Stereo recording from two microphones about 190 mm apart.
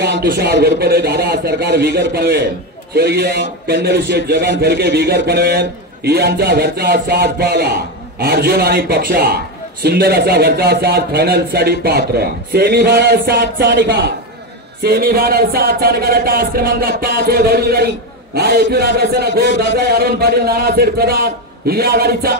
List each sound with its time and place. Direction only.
0.0 s a man's voice: 55° right (ahead or behind)